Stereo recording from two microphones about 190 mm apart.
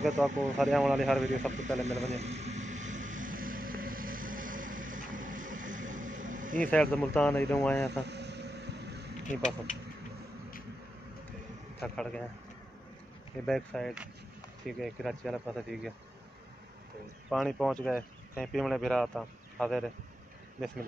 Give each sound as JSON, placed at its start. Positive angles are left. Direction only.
{"t": 0.3, "sound": "a man's voice", "side_deg": -40}
{"t": 0.6, "sound": "speech", "side_deg": 0}
{"t": 1.5, "sound": "a man's voice", "side_deg": -40}
{"t": 2.0, "sound": "vehicle", "side_deg": -35}
{"t": 6.7, "sound": "speech", "side_deg": 5}
{"t": 8.1, "sound": "vehicle", "side_deg": -65}
{"t": 9.2, "sound": "speech", "side_deg": 40}
{"t": 11.8, "sound": "speech", "side_deg": 5}
{"t": 13.5, "sound": "speech", "side_deg": 0}
{"t": 17.3, "sound": "speech", "side_deg": 0}